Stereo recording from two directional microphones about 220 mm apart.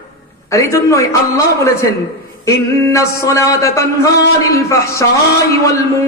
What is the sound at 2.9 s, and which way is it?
Speech, 15° left (ahead or behind).